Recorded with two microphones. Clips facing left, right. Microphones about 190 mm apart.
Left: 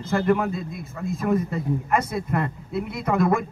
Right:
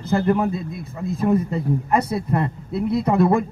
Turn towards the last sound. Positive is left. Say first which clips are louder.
# right 4 dB
turn(degrees=-30)  # may be behind; listen again after turning